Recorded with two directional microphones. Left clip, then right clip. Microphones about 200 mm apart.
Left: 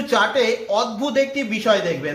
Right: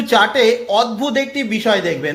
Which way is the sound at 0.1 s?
40° right (ahead or behind).